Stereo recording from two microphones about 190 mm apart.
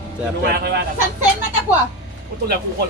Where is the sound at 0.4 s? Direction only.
55° right (ahead or behind).